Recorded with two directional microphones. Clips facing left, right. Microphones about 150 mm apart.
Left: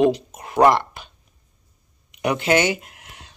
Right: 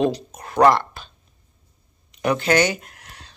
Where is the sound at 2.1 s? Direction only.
20° left (ahead or behind).